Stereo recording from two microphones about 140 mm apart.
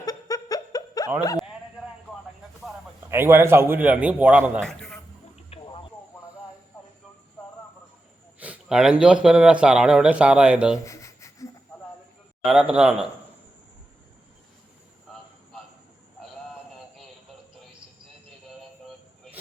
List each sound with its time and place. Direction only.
0.0 s laughter: 25° left (ahead or behind)
3.1 s speech: 15° right (ahead or behind)
4.6 s a man's voice: centre (ahead or behind)
5.5 s a sound: 45° left (ahead or behind)
8.4 s speech: 10° right (ahead or behind)
10.8 s rub: 20° left (ahead or behind)
12.5 s speech: 5° right (ahead or behind)